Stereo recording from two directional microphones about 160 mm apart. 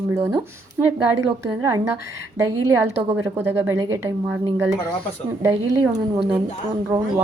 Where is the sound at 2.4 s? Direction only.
15° right (ahead or behind).